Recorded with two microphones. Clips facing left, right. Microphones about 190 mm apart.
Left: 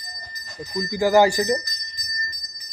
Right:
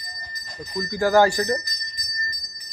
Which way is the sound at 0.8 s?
10° left (ahead or behind).